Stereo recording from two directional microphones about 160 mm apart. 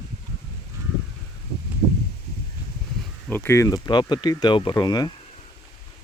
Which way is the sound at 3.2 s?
15° left (ahead or behind).